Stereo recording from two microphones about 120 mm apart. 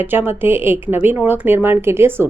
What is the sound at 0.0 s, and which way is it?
A woman's voice, 15° right (ahead or behind).